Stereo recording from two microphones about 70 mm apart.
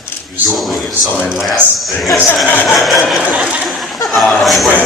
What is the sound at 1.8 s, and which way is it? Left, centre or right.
Speech, centre.